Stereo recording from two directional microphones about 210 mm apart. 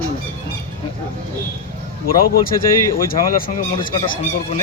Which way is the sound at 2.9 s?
40° left (ahead or behind).